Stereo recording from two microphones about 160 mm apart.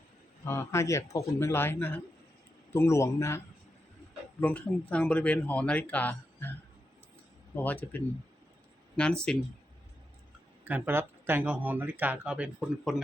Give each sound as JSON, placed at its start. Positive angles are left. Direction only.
{"t": 0.4, "sound": "speech", "side_deg": 15}
{"t": 7.5, "sound": "speech", "side_deg": 10}
{"t": 10.6, "sound": "speech", "side_deg": -10}